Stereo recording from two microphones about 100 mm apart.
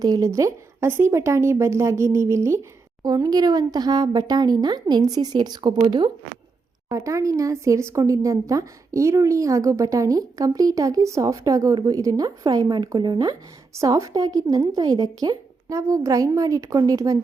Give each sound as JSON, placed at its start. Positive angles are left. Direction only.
{"t": 0.0, "sound": "speech", "side_deg": -35}
{"t": 3.2, "sound": "a woman's voice", "side_deg": -40}
{"t": 6.8, "sound": "speech", "side_deg": -30}
{"t": 13.7, "sound": "speech", "side_deg": -35}